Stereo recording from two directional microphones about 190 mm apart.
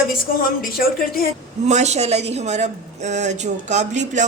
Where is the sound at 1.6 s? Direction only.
35° right (ahead or behind).